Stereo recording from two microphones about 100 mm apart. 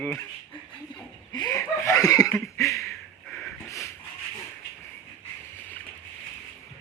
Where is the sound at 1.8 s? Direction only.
30° left (ahead or behind).